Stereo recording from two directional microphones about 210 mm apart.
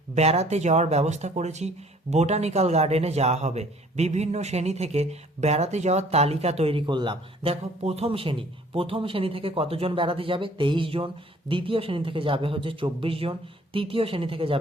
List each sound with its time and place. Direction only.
0.1 s speech: 30° right (ahead or behind)